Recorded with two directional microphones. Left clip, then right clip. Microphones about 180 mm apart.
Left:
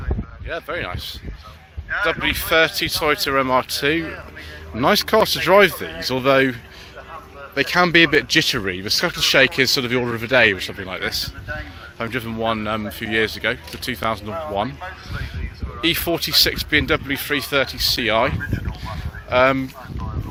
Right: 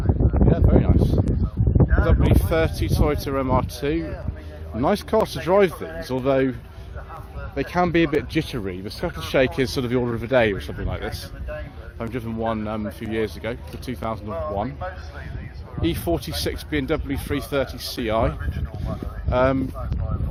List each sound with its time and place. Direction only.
0.5 s speech: 5° right (ahead or behind)
9.5 s speech: 15° right (ahead or behind)
11.9 s speech: centre (ahead or behind)
15.8 s speech: 10° right (ahead or behind)